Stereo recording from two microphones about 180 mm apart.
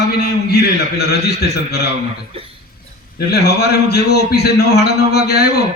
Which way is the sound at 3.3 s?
65° left (ahead or behind).